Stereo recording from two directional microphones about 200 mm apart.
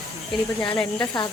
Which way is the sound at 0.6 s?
10° left (ahead or behind).